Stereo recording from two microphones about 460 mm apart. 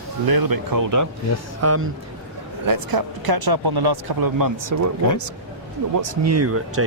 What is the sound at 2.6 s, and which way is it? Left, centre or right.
Speech, right.